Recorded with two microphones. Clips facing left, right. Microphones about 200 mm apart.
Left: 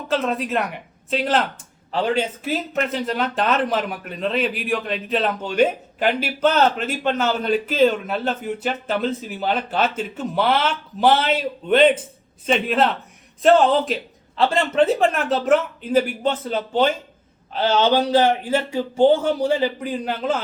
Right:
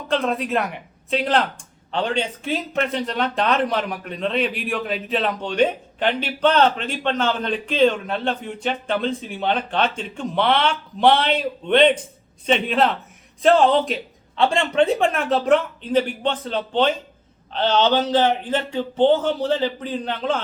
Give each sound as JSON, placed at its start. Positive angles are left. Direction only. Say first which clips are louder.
{"t": 0.1, "sound": "speech", "louder": "right 1 dB", "side_deg": 0}